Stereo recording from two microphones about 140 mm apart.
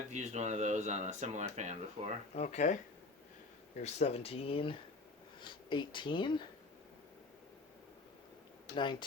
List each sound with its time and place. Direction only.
0.1 s speech: 55° right (ahead or behind)
2.3 s speech: 55° left (ahead or behind)
3.8 s speech: 50° left (ahead or behind); by 6.4 s 35° left (ahead or behind)
8.7 s speech: 35° left (ahead or behind)